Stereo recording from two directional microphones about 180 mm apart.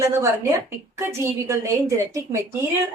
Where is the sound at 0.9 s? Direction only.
15° right (ahead or behind).